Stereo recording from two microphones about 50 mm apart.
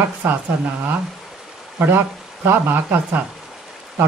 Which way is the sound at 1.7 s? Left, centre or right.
Right.